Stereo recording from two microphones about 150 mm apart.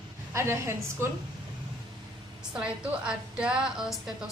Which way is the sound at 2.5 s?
5° right (ahead or behind).